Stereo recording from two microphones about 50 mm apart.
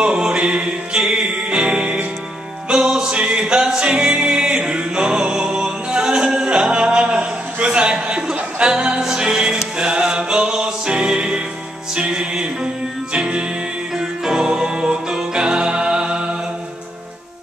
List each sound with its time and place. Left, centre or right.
0.0 s music: centre